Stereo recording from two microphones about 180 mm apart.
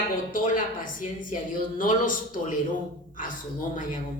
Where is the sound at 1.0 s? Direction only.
50° left (ahead or behind).